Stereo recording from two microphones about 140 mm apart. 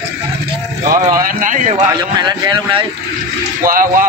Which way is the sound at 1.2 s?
70° right (ahead or behind).